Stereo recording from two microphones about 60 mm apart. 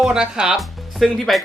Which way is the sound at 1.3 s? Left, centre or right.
Centre.